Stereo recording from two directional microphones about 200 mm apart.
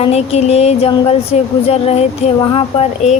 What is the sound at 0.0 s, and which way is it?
Speech, 30° left (ahead or behind).